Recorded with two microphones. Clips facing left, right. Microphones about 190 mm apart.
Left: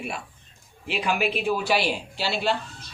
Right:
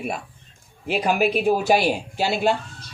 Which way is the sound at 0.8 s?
45° right (ahead or behind).